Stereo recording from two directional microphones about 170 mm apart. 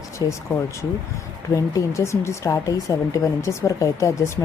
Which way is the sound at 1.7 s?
15° left (ahead or behind).